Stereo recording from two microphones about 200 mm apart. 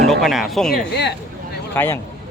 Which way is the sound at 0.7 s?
55° left (ahead or behind).